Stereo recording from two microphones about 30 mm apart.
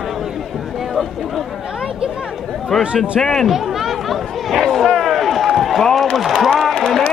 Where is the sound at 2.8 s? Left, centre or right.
Right.